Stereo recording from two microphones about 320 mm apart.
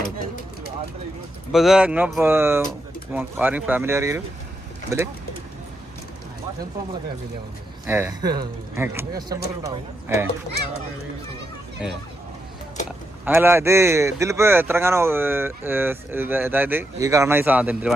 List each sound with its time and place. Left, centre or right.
1.5 s speech: centre
7.9 s speech: centre
12.8 s a sound: left
13.2 s speech: centre